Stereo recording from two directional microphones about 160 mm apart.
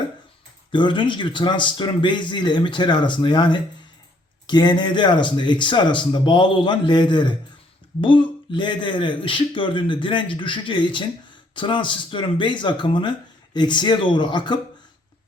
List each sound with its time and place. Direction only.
0.7 s speech: 30° left (ahead or behind)